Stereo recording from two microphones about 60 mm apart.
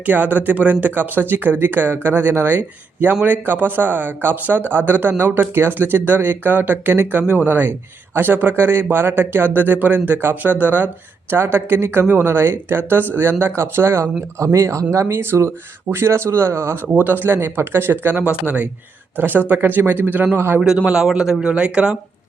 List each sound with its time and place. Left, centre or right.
0.0 s speech: right
14.4 s speech: right
15.0 s speech: right
16.8 s speech: right
20.7 s a man's voice: centre